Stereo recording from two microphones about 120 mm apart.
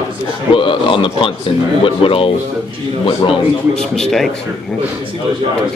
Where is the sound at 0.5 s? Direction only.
45° left (ahead or behind).